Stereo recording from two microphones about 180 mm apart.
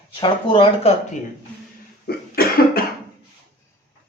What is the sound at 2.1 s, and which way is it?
Cough, 55° left (ahead or behind).